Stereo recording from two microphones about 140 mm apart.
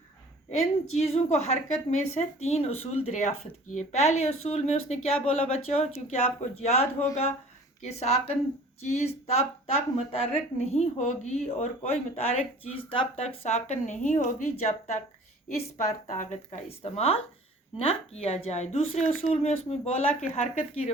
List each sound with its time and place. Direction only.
0.6 s a woman's voice: 50° left (ahead or behind)
16.0 s a woman's voice: 55° left (ahead or behind)